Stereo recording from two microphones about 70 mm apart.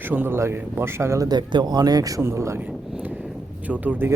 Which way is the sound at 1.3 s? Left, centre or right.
Right.